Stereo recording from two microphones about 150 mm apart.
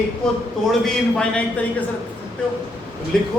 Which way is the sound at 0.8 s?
5° left (ahead or behind).